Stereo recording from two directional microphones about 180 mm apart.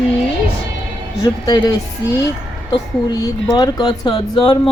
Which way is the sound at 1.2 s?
25° left (ahead or behind).